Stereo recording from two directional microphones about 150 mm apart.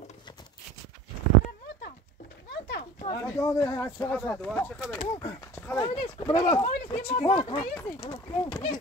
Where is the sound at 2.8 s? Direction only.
45° left (ahead or behind).